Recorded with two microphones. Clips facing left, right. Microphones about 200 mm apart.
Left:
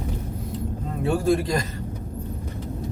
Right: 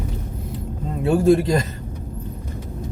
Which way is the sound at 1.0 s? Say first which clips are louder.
Right 6 dB; 25° right (ahead or behind).